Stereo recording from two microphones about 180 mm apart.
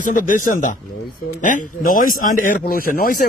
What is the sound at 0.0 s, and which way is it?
A man's voice, 45° left (ahead or behind).